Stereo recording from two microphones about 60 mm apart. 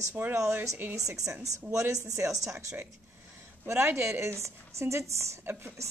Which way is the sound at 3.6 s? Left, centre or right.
Right.